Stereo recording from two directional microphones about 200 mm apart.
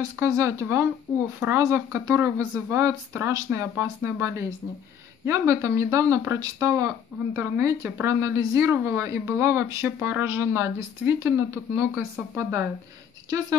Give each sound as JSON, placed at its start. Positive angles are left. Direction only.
{"t": 0.1, "sound": "a woman's voice", "side_deg": -15}